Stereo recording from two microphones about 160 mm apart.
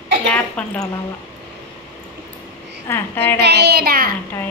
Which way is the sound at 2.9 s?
10° left (ahead or behind).